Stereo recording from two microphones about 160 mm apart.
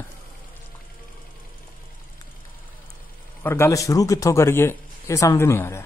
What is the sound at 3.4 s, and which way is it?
A man's voice, 15° left (ahead or behind).